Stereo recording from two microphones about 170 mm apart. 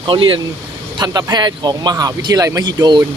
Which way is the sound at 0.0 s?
30° right (ahead or behind).